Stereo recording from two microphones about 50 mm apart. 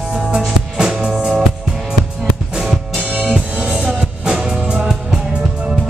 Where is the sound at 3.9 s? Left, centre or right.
Centre.